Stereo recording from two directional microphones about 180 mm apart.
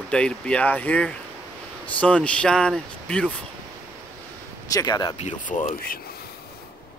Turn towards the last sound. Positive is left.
turn(degrees=55)  # may be behind; listen again after turning